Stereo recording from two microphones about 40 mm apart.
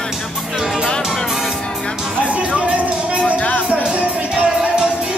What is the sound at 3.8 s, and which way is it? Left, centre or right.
Music, right.